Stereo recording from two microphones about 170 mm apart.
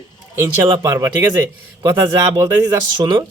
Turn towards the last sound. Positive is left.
turn(degrees=-25)  # may be behind; listen again after turning